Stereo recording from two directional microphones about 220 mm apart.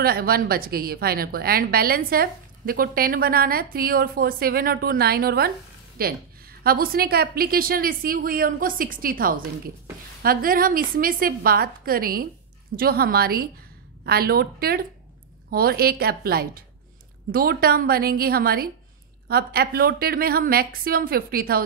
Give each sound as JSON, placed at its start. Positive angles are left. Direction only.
{"t": 0.0, "sound": "a woman's voice", "side_deg": -45}